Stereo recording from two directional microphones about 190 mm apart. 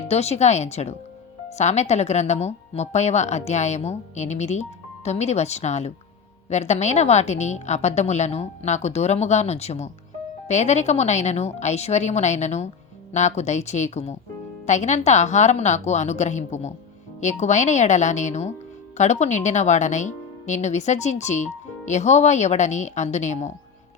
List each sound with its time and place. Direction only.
0.1 s speech: 35° left (ahead or behind)